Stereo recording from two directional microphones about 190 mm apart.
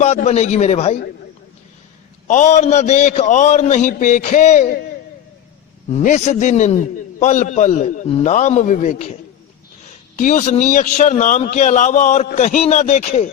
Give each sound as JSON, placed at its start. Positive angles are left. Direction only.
{"t": 0.0, "sound": "a man's voice", "side_deg": 35}
{"t": 2.2, "sound": "a man's voice", "side_deg": 40}
{"t": 5.9, "sound": "a man's voice", "side_deg": 40}
{"t": 10.2, "sound": "a man's voice", "side_deg": 40}